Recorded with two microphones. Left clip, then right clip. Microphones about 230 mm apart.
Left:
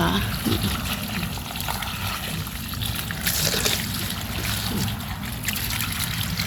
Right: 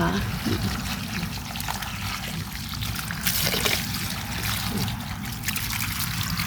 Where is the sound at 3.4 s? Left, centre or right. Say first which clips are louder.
Even; right.